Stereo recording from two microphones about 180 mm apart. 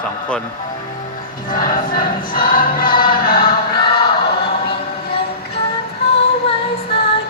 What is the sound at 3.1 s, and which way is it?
Music, 55° left (ahead or behind).